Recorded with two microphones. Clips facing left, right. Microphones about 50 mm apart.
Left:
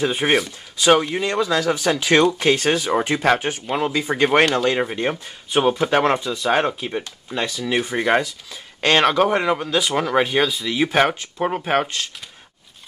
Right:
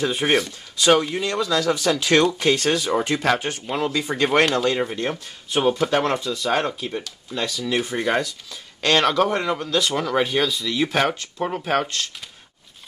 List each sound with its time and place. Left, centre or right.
0.0 s speech: centre
7.8 s speech: centre